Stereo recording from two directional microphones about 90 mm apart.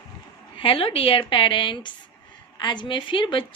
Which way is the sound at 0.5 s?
90° left.